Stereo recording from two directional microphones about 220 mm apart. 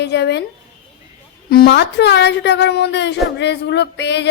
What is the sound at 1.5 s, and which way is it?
A woman's voice, 45° left (ahead or behind).